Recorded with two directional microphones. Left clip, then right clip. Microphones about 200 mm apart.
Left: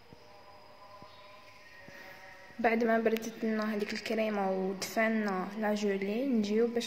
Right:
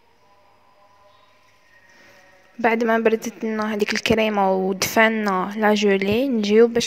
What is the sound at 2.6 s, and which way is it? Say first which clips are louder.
Speech: right 9 dB; 40° right (ahead or behind).